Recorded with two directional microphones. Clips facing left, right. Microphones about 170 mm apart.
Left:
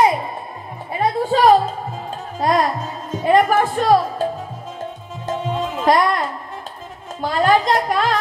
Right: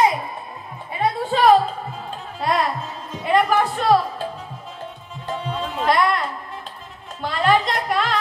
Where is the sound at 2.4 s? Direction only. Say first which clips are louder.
Left 4 dB; 45° left (ahead or behind).